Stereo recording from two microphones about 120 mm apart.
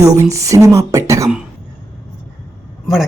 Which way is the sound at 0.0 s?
25° right (ahead or behind).